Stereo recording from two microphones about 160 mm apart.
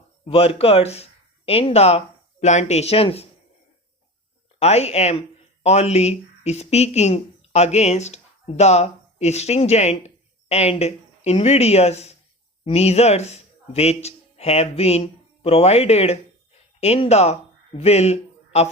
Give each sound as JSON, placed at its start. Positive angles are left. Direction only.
{"t": 0.3, "sound": "speech", "side_deg": 35}
{"t": 4.6, "sound": "speech", "side_deg": 40}